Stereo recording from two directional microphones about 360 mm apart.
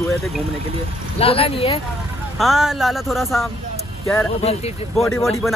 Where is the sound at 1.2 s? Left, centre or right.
Centre.